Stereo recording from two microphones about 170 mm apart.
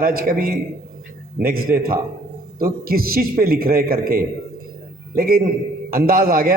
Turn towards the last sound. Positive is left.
turn(degrees=-60)  # may be behind; listen again after turning